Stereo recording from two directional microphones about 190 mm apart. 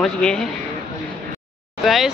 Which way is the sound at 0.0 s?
5° left (ahead or behind).